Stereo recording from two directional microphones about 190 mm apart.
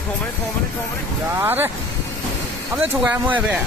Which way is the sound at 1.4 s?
10° right (ahead or behind).